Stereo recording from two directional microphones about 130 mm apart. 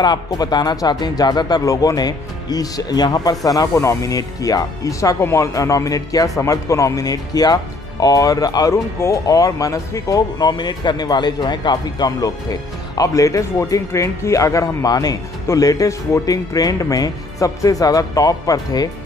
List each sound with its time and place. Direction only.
0.0 s speech: 35° left (ahead or behind)